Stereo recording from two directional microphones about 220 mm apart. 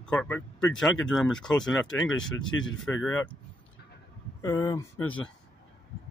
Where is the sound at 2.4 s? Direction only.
60° left (ahead or behind).